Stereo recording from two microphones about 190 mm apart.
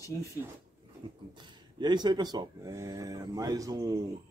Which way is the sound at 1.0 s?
25° right (ahead or behind).